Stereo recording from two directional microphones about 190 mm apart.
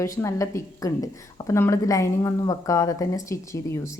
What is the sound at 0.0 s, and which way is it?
A woman's voice, 15° left (ahead or behind).